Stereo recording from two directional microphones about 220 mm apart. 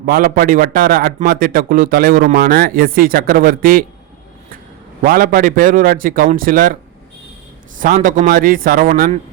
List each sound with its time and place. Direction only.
0.0 s a man's voice: 40° right (ahead or behind)
5.0 s a man's voice: 40° right (ahead or behind)
7.8 s a man's voice: 35° right (ahead or behind)